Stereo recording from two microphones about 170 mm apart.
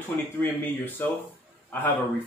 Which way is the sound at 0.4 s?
10° left (ahead or behind).